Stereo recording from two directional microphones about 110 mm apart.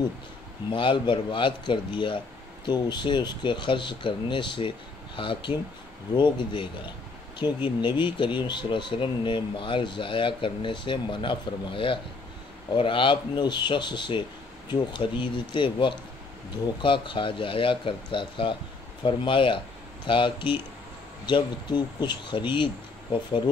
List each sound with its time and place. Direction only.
0.7 s speech: 50° left (ahead or behind)